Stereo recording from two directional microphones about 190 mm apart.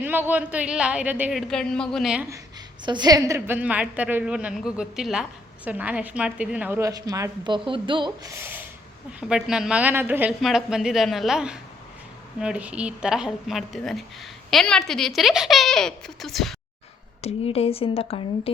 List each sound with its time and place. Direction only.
0.0 s a woman's voice: 10° right (ahead or behind)
2.8 s a woman's voice: 20° right (ahead or behind); by 16.6 s centre (ahead or behind)
17.2 s speech: 35° left (ahead or behind)